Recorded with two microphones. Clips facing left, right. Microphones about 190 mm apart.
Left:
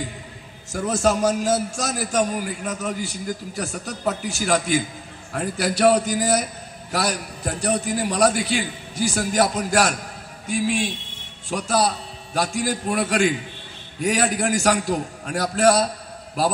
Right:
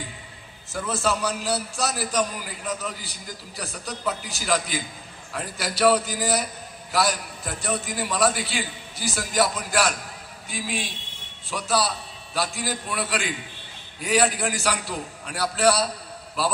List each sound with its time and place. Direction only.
0.7 s a man's voice: 45° left (ahead or behind)